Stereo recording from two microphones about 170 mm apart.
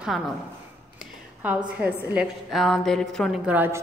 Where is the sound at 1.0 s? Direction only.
5° right (ahead or behind).